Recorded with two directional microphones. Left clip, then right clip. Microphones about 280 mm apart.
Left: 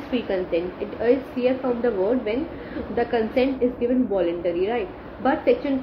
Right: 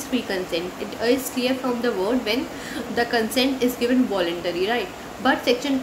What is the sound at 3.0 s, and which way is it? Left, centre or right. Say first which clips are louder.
Speech: even; centre.